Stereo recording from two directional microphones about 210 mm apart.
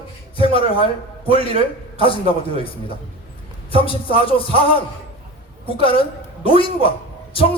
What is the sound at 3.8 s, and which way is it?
A woman's voice, 25° left (ahead or behind).